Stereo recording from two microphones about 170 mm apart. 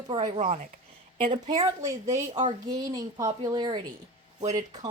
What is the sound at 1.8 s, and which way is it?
Speech, 20° right (ahead or behind).